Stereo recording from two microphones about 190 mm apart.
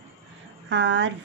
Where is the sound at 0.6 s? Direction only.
80° right.